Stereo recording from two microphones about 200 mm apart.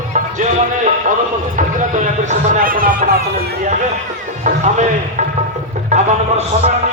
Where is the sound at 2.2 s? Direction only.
45° right (ahead or behind).